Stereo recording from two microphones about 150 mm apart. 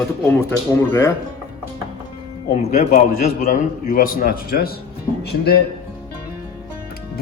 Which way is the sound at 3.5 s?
65° left (ahead or behind).